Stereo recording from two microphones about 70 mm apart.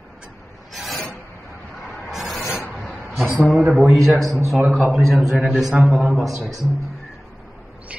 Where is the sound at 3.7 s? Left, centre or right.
Centre.